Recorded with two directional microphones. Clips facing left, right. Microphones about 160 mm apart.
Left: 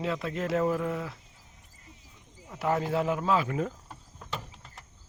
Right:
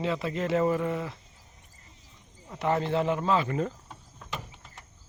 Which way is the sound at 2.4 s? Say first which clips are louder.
Right 1 dB; 5° left (ahead or behind).